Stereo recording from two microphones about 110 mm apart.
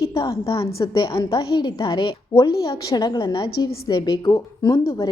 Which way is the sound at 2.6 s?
35° left (ahead or behind).